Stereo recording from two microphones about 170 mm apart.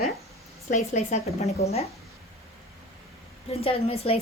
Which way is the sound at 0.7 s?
40° left (ahead or behind).